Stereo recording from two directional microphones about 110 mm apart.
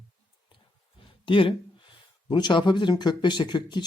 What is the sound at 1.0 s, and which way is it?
Speech, 50° left (ahead or behind).